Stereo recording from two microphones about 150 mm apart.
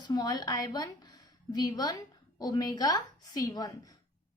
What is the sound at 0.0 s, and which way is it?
A woman's voice, 25° left (ahead or behind).